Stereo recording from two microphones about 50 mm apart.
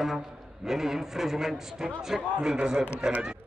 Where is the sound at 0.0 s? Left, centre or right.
Centre.